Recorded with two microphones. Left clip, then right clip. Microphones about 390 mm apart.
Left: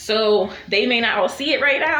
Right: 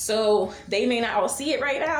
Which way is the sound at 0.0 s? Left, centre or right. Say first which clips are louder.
Left 4 dB; right.